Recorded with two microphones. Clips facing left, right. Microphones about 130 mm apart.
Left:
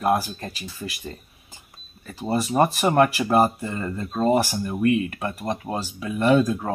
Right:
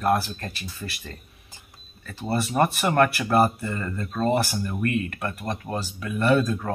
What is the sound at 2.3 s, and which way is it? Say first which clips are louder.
Speech: left 2 dB; 15° left (ahead or behind).